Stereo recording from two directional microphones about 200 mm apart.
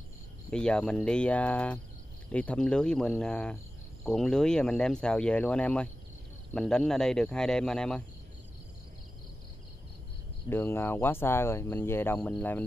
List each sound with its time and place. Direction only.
0.5 s speech: 5° left (ahead or behind)
10.5 s speech: 10° left (ahead or behind)